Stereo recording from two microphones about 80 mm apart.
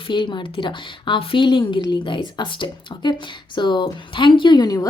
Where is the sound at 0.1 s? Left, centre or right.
Left.